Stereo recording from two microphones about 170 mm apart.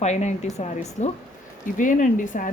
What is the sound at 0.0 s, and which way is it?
A woman's voice, 40° left (ahead or behind).